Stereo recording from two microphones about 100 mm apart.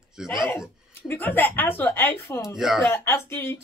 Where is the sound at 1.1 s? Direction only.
20° left (ahead or behind).